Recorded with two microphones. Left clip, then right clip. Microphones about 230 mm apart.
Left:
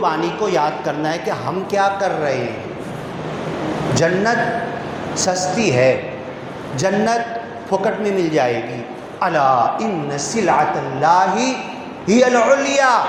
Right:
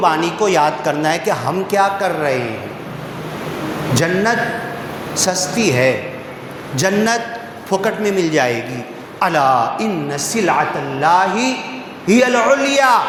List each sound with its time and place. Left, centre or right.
0.0 s speech: right
3.9 s speech: right